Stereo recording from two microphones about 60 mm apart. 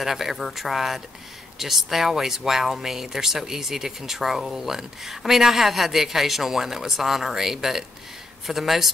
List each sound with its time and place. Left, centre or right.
0.0 s speech: centre